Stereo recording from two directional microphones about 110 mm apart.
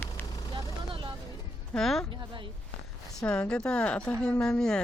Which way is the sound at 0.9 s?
50° right (ahead or behind).